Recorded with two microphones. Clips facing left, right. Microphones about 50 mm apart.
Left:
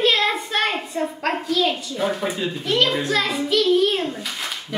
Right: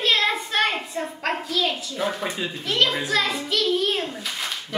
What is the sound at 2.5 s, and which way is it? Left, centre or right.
A child's voice, centre.